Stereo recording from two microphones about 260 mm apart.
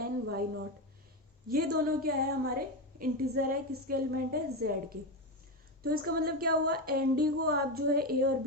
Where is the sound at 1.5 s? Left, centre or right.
Right.